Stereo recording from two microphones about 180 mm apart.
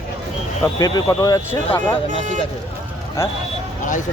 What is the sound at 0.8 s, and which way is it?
Speech, 20° left (ahead or behind).